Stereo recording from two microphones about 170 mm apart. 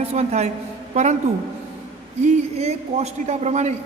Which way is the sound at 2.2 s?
40° right (ahead or behind).